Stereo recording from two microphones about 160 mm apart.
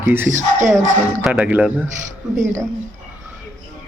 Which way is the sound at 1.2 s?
10° right (ahead or behind).